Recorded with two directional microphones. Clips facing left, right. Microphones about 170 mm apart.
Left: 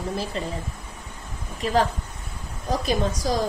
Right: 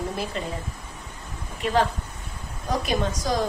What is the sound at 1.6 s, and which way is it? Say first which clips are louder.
A woman's voice: left 1 dB; 35° left (ahead or behind).